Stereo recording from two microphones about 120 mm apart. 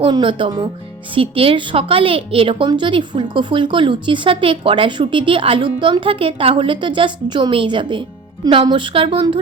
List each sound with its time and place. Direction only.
0.0 s a woman's voice: 45° right (ahead or behind)